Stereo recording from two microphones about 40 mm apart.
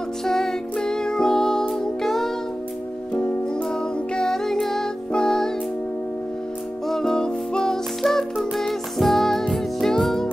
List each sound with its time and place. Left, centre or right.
0.2 s music: centre
4.1 s music: centre
6.9 s music: centre
8.0 s music: centre